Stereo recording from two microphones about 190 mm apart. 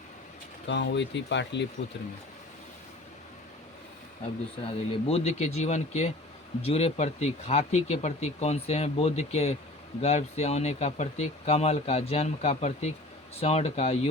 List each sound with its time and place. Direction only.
0.7 s speech: 65° left (ahead or behind)
4.2 s speech: 30° left (ahead or behind)